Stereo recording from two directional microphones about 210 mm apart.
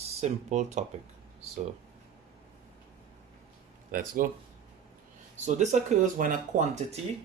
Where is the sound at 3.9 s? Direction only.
40° right (ahead or behind).